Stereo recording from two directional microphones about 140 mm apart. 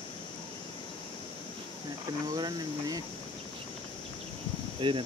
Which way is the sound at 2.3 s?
30° right (ahead or behind).